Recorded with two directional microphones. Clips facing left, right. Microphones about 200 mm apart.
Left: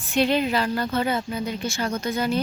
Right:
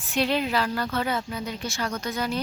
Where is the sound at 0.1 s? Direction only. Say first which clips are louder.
Left 3 dB; centre (ahead or behind).